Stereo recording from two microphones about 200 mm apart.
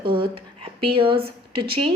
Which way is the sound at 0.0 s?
25° right (ahead or behind).